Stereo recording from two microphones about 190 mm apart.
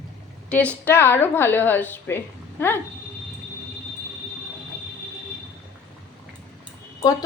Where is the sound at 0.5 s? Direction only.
5° left (ahead or behind).